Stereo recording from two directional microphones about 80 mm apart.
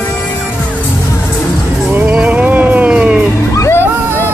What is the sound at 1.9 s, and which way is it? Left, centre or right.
Music, centre.